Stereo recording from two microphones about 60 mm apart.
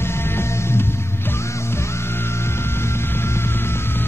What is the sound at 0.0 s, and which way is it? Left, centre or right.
Music, left.